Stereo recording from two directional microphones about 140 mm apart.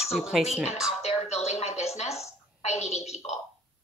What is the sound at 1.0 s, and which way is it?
Music, 50° left (ahead or behind).